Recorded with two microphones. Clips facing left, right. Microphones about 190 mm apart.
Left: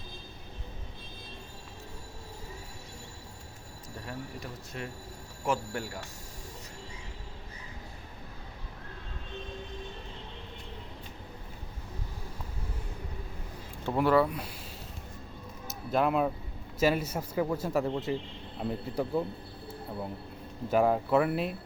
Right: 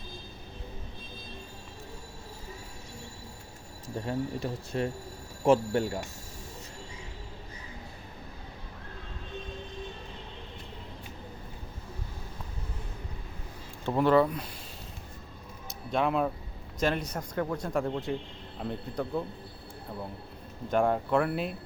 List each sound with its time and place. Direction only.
3.8 s speech: 30° right (ahead or behind)
13.8 s speech: 5° left (ahead or behind)
15.6 s a sound: 5° left (ahead or behind)
16.8 s speech: 5° left (ahead or behind)
20.7 s speech: 5° left (ahead or behind)